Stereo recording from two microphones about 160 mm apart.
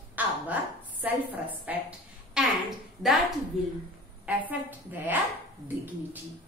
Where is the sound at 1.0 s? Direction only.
10° right (ahead or behind).